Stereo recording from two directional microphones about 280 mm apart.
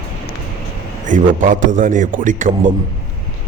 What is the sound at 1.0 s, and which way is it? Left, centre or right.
A man's voice, right.